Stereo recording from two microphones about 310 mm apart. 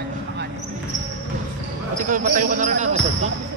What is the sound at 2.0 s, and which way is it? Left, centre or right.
Speech, right.